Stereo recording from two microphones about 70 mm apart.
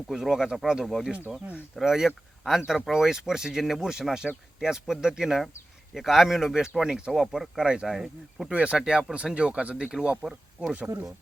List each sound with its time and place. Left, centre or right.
0.1 s speech: centre
10.2 s speech: centre